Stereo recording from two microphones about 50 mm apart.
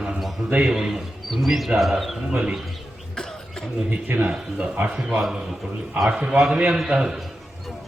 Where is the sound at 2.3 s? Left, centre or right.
Right.